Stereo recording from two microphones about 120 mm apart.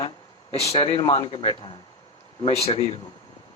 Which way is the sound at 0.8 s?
45° left (ahead or behind).